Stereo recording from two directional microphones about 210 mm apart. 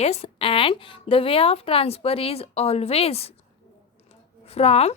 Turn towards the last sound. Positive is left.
turn(degrees=30)  # may be behind; listen again after turning